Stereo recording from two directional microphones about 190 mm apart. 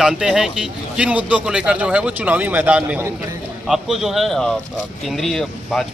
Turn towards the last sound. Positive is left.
turn(degrees=0)  # may be behind; listen again after turning